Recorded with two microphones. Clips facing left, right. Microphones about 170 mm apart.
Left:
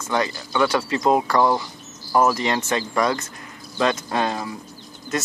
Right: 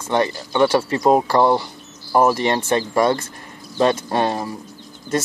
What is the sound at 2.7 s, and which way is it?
Speech, 30° right (ahead or behind).